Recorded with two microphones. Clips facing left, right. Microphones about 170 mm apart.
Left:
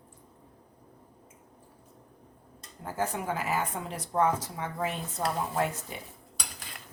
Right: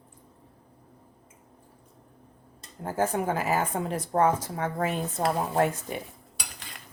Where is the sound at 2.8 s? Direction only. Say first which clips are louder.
Right 5 dB; 45° right (ahead or behind).